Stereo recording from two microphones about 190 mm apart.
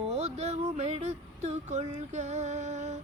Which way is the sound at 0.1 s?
35° right (ahead or behind).